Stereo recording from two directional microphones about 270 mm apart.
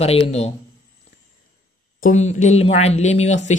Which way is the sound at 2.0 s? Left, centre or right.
Left.